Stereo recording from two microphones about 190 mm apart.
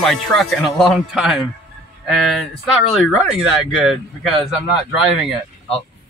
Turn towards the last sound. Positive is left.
turn(degrees=0)  # may be behind; listen again after turning